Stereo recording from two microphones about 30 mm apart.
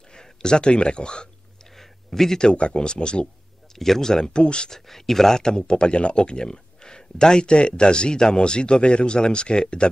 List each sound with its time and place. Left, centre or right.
0.1 s speech: left
1.8 s a sound: centre
2.5 s speech: left
3.7 s speech: centre
4.4 s speech: left
4.6 s speech: centre
5.7 s speech: left